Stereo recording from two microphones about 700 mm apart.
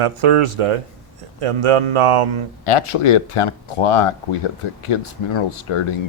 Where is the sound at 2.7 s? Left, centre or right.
Left.